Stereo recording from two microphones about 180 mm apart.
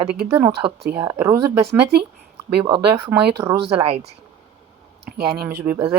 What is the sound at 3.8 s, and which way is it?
Speech, 35° right (ahead or behind).